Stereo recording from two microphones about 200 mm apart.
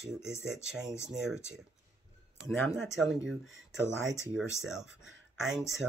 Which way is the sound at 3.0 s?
65° right (ahead or behind).